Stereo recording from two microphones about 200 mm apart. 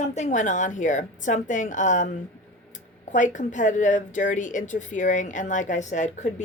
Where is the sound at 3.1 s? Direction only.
40° left (ahead or behind).